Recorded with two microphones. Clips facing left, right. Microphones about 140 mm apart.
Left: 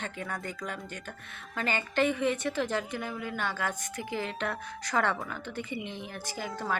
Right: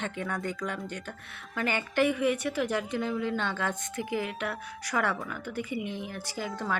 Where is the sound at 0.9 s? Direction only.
15° right (ahead or behind).